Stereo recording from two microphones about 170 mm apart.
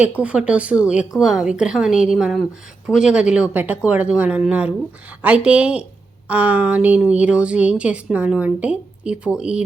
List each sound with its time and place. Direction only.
0.2 s a woman's voice: 5° right (ahead or behind)